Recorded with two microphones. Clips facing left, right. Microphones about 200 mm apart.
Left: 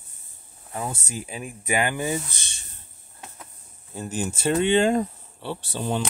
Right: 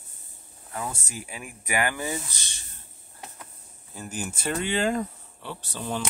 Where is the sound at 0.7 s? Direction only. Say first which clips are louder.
Left 3 dB; 25° left (ahead or behind).